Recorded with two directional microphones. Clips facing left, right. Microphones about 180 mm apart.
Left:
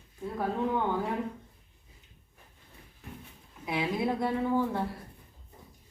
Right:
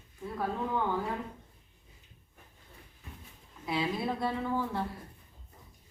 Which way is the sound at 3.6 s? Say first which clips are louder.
Left 2 dB; 15° left (ahead or behind).